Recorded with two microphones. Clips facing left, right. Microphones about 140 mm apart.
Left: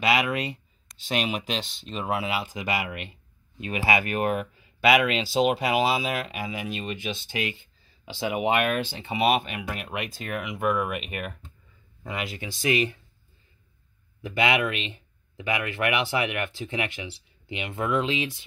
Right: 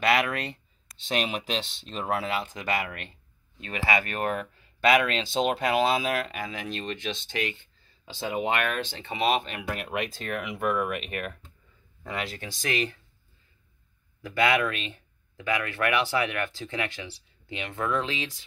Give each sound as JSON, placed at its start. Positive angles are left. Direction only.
{"t": 0.0, "sound": "speech", "side_deg": 5}
{"t": 14.2, "sound": "speech", "side_deg": 20}